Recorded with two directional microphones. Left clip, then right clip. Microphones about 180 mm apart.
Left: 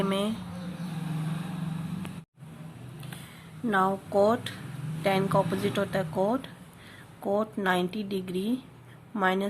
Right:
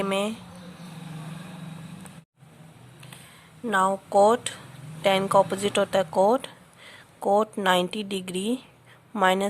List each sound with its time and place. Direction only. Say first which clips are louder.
0.0 s speech: right 3 dB; 50° right (ahead or behind)
3.7 s speech: right 3 dB; 55° right (ahead or behind)